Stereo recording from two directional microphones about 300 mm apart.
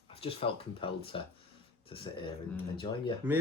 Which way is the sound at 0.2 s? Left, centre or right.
Centre.